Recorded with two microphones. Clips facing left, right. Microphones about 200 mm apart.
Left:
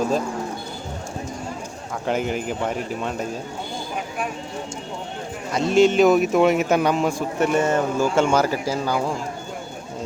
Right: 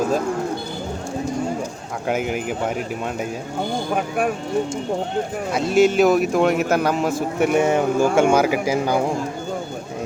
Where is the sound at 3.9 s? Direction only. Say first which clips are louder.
Right 6 dB; 55° right (ahead or behind).